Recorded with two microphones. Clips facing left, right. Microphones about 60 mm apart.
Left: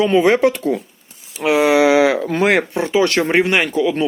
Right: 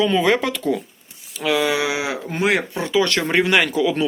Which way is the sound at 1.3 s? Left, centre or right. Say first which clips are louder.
Left 6 dB; left.